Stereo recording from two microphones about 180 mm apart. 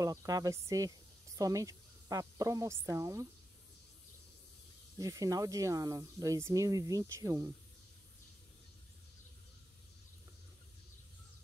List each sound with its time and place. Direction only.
0.0 s a woman's voice: 15° right (ahead or behind)
4.9 s speech: 20° right (ahead or behind)